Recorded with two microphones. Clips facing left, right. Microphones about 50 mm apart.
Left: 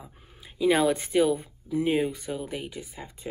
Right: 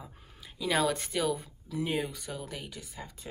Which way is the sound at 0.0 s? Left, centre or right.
Left.